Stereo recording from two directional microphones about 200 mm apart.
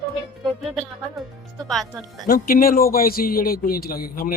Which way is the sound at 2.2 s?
45° left (ahead or behind).